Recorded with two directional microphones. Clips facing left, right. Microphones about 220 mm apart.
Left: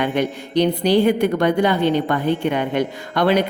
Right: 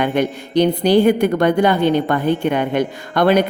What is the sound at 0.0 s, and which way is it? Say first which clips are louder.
A woman's voice: right 2 dB; 50° right (ahead or behind).